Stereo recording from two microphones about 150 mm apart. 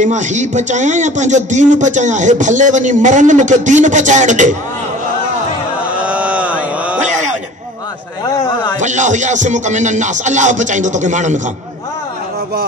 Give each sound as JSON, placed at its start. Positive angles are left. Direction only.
{"t": 0.0, "sound": "speech", "side_deg": -55}
{"t": 5.9, "sound": "a sound", "side_deg": -10}
{"t": 8.7, "sound": "speech", "side_deg": -55}